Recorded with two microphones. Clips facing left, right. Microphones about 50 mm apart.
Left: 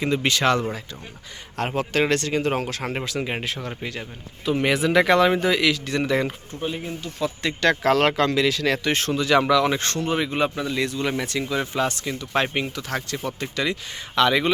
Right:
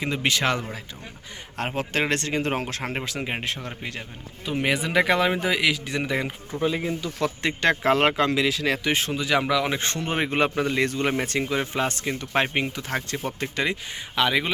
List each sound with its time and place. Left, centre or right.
0.0 s speech: centre; by 2.5 s right
2.8 s speech: centre
7.4 s speech: right
10.0 s speech: right
12.3 s speech: right
14.2 s speech: centre